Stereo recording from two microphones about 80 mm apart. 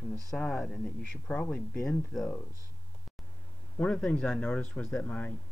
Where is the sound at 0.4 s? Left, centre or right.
Centre.